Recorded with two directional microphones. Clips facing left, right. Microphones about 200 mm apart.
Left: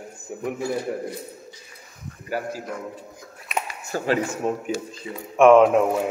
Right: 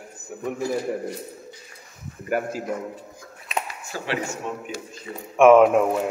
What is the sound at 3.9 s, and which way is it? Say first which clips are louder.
Speech: left 5 dB; 40° left (ahead or behind).